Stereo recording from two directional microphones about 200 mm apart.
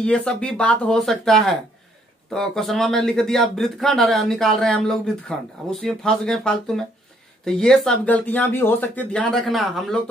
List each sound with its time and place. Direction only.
0.0 s speech: 5° left (ahead or behind)